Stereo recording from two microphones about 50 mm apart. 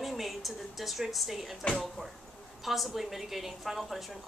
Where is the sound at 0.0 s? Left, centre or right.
Centre.